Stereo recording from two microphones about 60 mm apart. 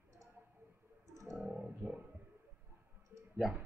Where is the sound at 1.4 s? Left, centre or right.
Centre.